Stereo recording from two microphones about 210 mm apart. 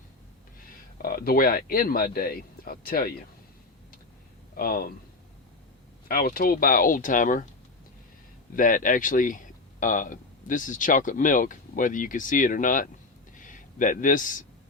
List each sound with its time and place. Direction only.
1.0 s speech: 45° left (ahead or behind)
4.5 s speech: 45° left (ahead or behind)
6.1 s speech: 45° left (ahead or behind)
8.5 s speech: 40° left (ahead or behind)
13.3 s a sound: 40° left (ahead or behind)